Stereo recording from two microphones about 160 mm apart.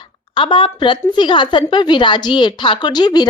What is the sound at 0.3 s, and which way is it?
Speech, 30° left (ahead or behind).